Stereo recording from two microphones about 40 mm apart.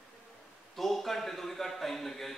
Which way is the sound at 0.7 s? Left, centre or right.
Centre.